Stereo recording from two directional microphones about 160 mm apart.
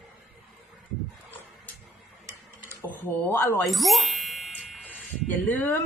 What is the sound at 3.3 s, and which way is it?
Speech, 15° left (ahead or behind).